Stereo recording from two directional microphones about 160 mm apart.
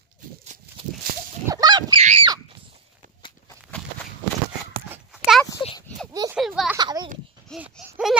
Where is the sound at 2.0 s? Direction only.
45° right (ahead or behind).